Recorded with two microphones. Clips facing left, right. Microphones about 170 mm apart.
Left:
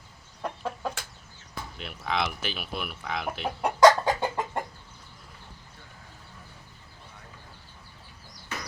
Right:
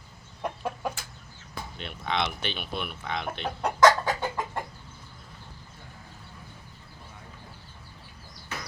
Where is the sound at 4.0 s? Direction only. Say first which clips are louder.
Left 3 dB; 15° left (ahead or behind).